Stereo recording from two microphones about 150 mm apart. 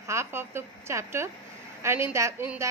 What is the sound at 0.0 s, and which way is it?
A woman's voice, 20° right (ahead or behind).